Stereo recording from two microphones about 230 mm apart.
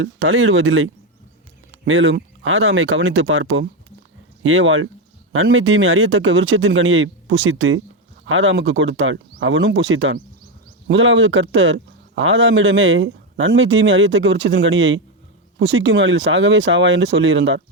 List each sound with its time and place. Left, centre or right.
0.0 s speech: right